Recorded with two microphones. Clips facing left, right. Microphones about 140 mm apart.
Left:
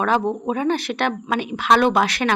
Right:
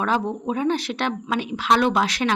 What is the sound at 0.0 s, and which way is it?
Speech, 60° left (ahead or behind).